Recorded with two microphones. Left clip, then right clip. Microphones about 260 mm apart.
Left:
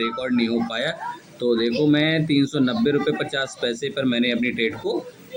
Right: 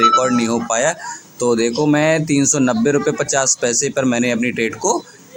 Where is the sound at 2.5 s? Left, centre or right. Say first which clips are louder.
Right 5 dB; right.